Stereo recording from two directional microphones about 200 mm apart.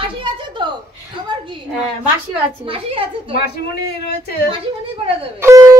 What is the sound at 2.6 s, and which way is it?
Speech, 25° right (ahead or behind).